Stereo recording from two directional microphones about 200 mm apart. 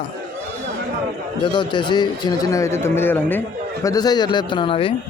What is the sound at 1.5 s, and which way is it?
A man's voice, 20° left (ahead or behind).